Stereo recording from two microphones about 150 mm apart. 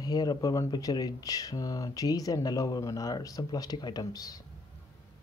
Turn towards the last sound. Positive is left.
turn(degrees=25)  # may be behind; listen again after turning